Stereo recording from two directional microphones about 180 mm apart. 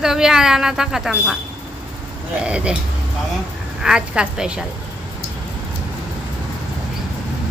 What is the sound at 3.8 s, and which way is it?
Speech, 5° right (ahead or behind).